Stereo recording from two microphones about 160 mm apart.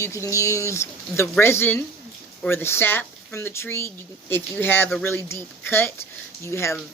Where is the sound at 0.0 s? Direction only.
20° left (ahead or behind).